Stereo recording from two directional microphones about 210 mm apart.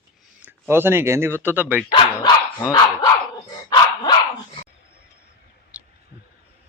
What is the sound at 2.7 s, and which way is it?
Dog, 20° left (ahead or behind).